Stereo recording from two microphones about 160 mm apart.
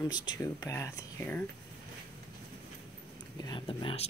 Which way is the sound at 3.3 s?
25° left (ahead or behind).